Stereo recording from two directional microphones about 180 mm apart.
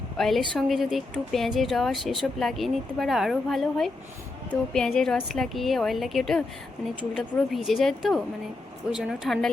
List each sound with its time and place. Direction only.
0.2 s a woman's voice: centre (ahead or behind)